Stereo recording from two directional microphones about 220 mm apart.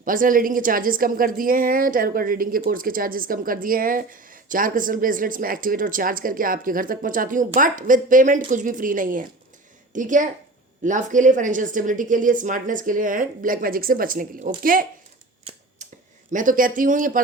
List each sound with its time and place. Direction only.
0.0 s a woman's voice: 40° right (ahead or behind)
15.5 s a sound: 25° right (ahead or behind)
16.3 s a woman's voice: 35° right (ahead or behind)